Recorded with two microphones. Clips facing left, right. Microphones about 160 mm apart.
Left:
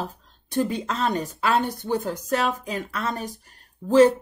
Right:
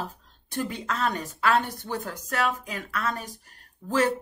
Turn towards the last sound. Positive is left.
turn(degrees=25)  # may be behind; listen again after turning